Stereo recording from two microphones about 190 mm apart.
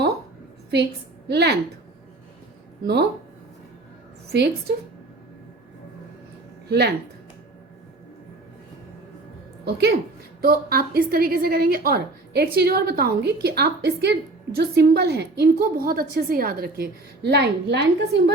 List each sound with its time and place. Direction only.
1.3 s speech: 60° right (ahead or behind)
2.8 s speech: 60° right (ahead or behind)
6.7 s speech: 60° right (ahead or behind)
9.6 s a woman's voice: 60° right (ahead or behind)